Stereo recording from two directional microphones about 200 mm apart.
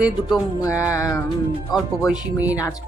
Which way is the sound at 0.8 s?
15° left (ahead or behind).